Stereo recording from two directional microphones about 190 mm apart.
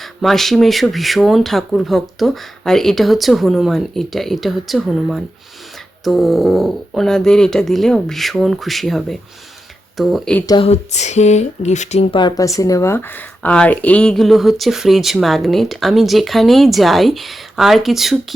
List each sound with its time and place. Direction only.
0.0 s speech: centre (ahead or behind)
10.4 s speech: 20° left (ahead or behind)
10.7 s speech: 35° left (ahead or behind); by 18.3 s centre (ahead or behind)